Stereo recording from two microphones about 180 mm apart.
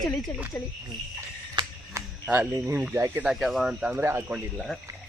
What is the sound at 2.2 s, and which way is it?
Speech, 10° right (ahead or behind).